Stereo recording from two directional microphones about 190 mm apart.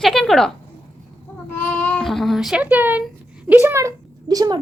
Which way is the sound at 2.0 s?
Centre (ahead or behind).